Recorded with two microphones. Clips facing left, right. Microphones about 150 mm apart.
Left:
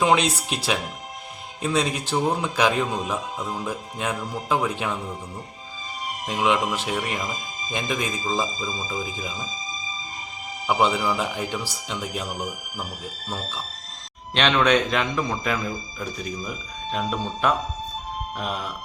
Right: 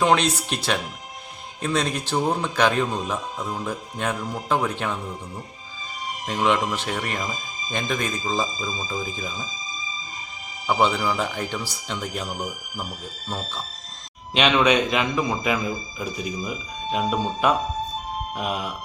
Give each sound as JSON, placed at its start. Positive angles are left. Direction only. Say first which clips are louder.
{"t": 0.0, "sound": "speech", "louder": "even", "side_deg": 5}
{"t": 6.2, "sound": "speech", "louder": "even", "side_deg": 5}
{"t": 10.7, "sound": "speech", "louder": "even", "side_deg": 5}
{"t": 14.3, "sound": "a man's voice", "louder": "right 1 dB", "side_deg": -5}